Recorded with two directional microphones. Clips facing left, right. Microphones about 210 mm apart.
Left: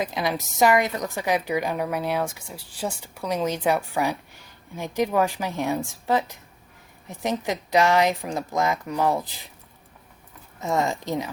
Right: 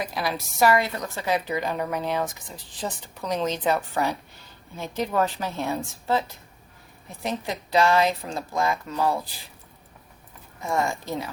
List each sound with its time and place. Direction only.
0.0 s a woman's voice: 20° left (ahead or behind)
10.6 s speech: 20° left (ahead or behind)